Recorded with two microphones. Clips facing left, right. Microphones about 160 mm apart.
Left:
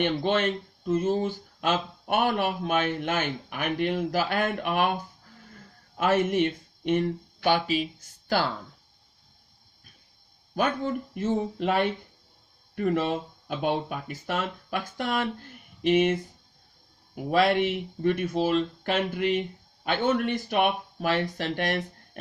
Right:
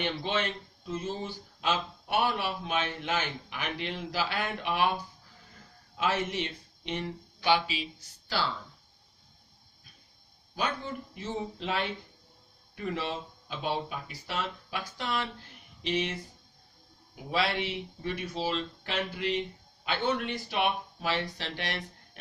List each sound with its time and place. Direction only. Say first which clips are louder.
0.0 s speech: left 7 dB; 50° left (ahead or behind)
6.0 s speech: left 7 dB; 50° left (ahead or behind)
10.5 s speech: left 7 dB; 55° left (ahead or behind)
17.2 s speech: left 8 dB; 55° left (ahead or behind)